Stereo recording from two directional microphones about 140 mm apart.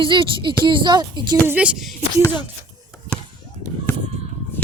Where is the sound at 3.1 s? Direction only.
35° left (ahead or behind).